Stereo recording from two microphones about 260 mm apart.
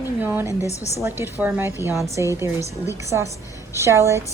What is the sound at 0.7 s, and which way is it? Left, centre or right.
Speech, left.